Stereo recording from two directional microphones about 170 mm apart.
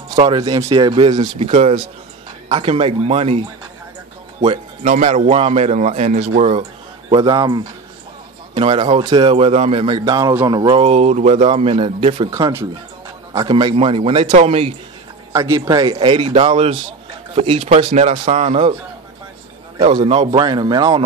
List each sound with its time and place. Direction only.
0.4 s a man's voice: 20° right (ahead or behind)
1.5 s a man's voice: 40° right (ahead or behind)
4.8 s speech: 40° right (ahead or behind)
7.1 s a man's voice: 25° right (ahead or behind)
12.3 s a man's voice: 20° right (ahead or behind); by 14.7 s 35° right (ahead or behind)
15.3 s a man's voice: 15° right (ahead or behind); by 18.8 s 40° right (ahead or behind)
19.8 s a man's voice: 30° right (ahead or behind)